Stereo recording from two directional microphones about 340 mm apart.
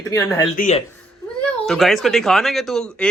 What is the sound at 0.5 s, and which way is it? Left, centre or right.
Speech, left.